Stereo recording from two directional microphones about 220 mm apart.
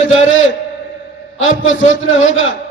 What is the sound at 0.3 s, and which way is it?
A man's voice, 60° left (ahead or behind).